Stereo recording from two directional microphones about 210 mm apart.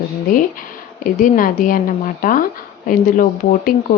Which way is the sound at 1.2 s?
40° left (ahead or behind).